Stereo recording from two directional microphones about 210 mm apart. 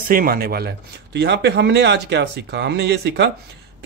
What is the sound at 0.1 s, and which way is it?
A man's voice, 45° right (ahead or behind).